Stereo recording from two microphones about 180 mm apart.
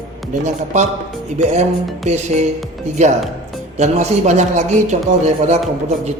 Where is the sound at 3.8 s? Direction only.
40° right (ahead or behind).